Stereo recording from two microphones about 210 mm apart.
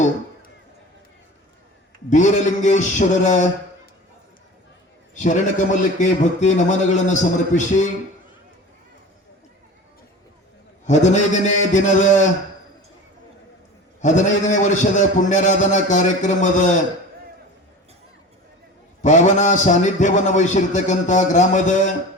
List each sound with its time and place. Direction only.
2.0 s a man's voice: 35° left (ahead or behind)
5.1 s a man's voice: 35° left (ahead or behind)
10.8 s a man's voice: 35° left (ahead or behind)
14.0 s a man's voice: 35° left (ahead or behind)
19.0 s a man's voice: 35° left (ahead or behind)